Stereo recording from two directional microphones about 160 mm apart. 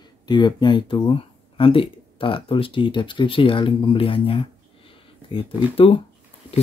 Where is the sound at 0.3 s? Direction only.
30° left (ahead or behind).